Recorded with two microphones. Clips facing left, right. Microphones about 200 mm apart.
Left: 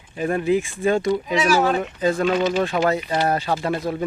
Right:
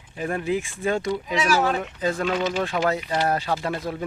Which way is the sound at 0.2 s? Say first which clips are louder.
Left 5 dB; 15° left (ahead or behind).